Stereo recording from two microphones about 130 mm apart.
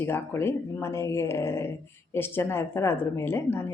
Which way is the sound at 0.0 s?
20° left (ahead or behind).